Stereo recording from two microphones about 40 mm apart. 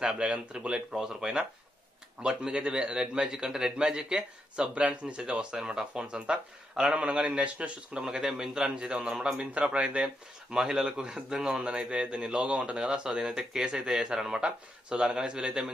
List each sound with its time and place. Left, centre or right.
0.0 s speech: centre
0.5 s a man's voice: right
10.5 s a man's voice: centre
13.2 s a man's voice: centre